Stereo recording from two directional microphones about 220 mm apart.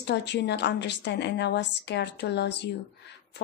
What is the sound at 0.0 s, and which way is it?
A woman's voice, 50° left (ahead or behind).